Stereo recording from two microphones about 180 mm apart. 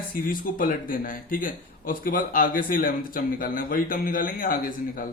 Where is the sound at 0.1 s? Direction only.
50° left (ahead or behind).